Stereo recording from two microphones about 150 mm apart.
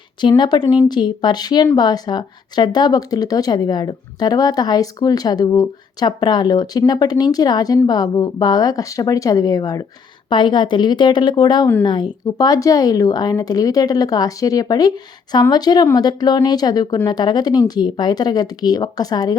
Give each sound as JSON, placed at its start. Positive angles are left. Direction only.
{"t": 0.2, "sound": "speech", "side_deg": 30}